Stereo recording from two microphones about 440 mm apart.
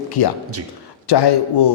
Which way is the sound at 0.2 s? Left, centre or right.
Left.